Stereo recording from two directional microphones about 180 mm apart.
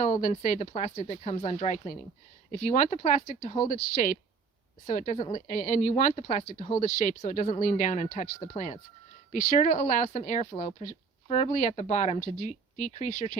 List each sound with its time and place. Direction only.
0.0 s speech: 45° left (ahead or behind)
4.0 s speech: 45° left (ahead or behind)